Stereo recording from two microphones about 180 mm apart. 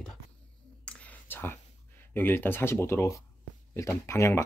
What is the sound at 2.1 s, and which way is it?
Speech, 10° left (ahead or behind).